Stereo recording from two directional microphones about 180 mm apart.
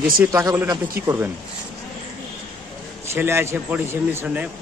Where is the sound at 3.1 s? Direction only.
15° right (ahead or behind).